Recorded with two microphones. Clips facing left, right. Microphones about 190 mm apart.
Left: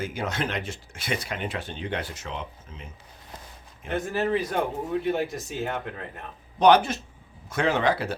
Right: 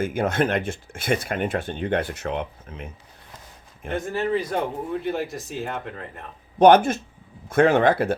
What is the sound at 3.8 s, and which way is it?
Speech, 55° right (ahead or behind).